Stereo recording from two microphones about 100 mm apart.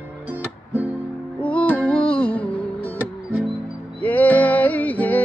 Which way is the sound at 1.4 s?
15° left (ahead or behind).